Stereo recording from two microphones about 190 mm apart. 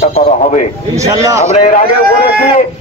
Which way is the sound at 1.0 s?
15° right (ahead or behind).